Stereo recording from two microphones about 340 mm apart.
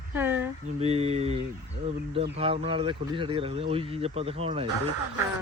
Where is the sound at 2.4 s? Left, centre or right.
Centre.